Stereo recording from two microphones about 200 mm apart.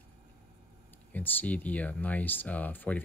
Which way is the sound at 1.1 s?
10° left (ahead or behind).